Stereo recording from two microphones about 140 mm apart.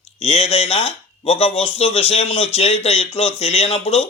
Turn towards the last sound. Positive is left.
turn(degrees=45)  # may be behind; listen again after turning